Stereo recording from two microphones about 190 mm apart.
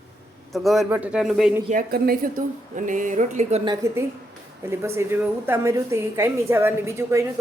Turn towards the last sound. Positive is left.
turn(degrees=-15)  # may be behind; listen again after turning